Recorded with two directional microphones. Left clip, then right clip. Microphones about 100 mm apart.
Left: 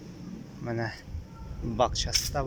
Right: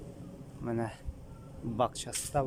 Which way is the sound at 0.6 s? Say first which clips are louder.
Left 2 dB; 25° right (ahead or behind).